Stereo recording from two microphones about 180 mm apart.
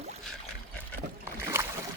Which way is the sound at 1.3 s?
15° right (ahead or behind).